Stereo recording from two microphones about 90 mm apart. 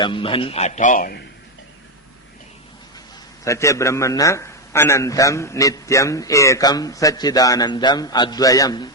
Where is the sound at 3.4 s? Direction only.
35° left (ahead or behind).